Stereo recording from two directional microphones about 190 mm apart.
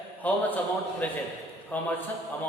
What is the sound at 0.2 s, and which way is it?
A man's voice, 10° left (ahead or behind).